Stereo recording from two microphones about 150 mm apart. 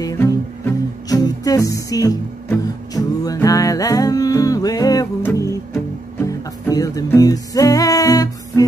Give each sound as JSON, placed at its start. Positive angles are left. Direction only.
{"t": 0.0, "sound": "music", "side_deg": 20}